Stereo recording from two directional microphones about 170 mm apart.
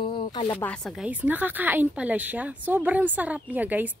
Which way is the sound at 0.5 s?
5° left (ahead or behind).